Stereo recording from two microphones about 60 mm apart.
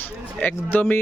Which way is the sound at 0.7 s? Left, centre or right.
Left.